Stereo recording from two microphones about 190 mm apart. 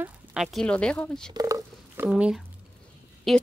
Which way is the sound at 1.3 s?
20° right (ahead or behind).